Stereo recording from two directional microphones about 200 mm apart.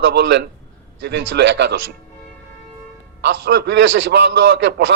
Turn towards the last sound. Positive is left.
turn(degrees=-60)  # may be behind; listen again after turning